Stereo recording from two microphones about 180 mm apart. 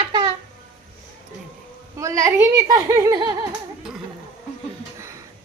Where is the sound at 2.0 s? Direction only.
15° right (ahead or behind).